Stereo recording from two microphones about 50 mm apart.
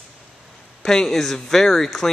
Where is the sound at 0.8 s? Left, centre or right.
Centre.